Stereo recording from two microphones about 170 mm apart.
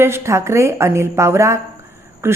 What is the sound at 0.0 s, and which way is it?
A woman's voice, 15° right (ahead or behind).